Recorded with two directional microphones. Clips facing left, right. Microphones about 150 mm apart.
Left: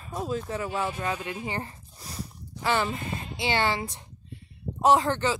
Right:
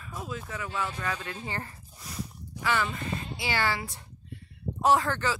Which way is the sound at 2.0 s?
30° left (ahead or behind).